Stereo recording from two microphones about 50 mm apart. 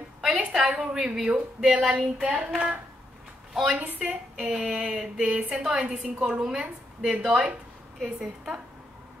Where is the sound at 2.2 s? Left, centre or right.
Right.